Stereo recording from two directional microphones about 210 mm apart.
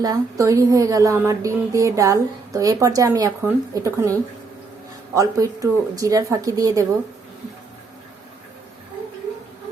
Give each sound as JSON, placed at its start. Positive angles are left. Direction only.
{"t": 0.0, "sound": "a woman's voice", "side_deg": -15}